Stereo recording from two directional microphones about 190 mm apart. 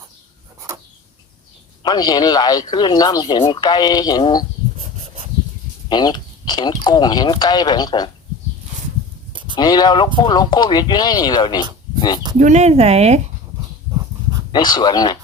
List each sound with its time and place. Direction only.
1.8 s speech: 20° left (ahead or behind)
5.9 s speech: 20° left (ahead or behind)
9.3 s a sound: 25° right (ahead or behind)
9.6 s speech: 20° left (ahead or behind)
12.4 s speech: 35° right (ahead or behind)
14.5 s speech: 20° left (ahead or behind)